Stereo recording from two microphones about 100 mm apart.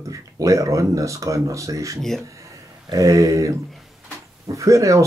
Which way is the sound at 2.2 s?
35° right (ahead or behind).